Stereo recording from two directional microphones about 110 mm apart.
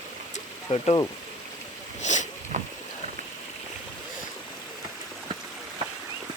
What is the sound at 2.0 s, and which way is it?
Boat, 90° left.